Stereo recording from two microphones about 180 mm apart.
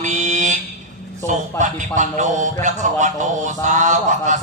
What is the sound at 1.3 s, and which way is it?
A man's voice, 45° right (ahead or behind).